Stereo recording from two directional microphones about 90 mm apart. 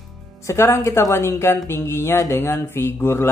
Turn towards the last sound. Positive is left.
turn(degrees=30)  # may be behind; listen again after turning